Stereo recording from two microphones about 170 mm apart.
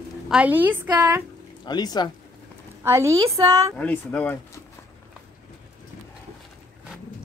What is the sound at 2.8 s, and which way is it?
Speech, 15° right (ahead or behind).